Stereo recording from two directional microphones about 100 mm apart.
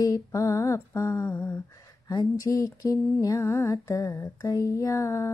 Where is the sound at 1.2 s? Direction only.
15° left (ahead or behind).